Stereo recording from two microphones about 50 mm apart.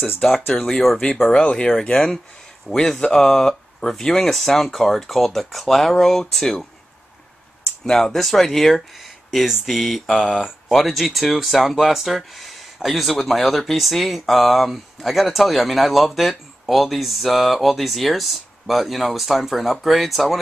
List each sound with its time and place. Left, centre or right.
0.2 s speech: centre
1.4 s speech: left
2.7 s speech: centre
7.8 s speech: centre